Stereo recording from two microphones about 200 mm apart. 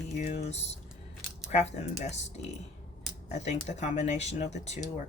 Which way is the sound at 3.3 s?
35° left (ahead or behind).